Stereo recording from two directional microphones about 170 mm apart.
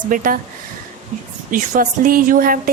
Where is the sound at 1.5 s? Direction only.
55° right (ahead or behind).